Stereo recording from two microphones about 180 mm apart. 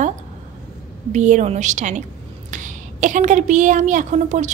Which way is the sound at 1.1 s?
40° right (ahead or behind).